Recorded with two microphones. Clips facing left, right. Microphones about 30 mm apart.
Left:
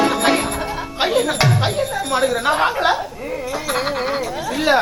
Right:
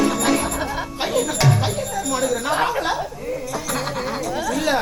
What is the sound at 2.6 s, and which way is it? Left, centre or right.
A woman's voice, left.